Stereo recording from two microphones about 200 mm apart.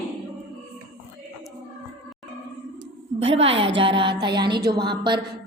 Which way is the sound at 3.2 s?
25° right (ahead or behind).